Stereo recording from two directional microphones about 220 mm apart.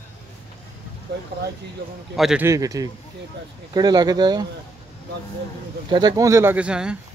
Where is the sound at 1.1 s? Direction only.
50° right (ahead or behind).